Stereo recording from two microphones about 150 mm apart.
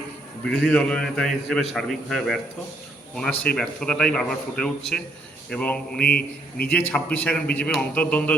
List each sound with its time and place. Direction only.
0.5 s a man's voice: 5° left (ahead or behind)
6.1 s a man's voice: 90° left
6.7 s a man's voice: 10° left (ahead or behind)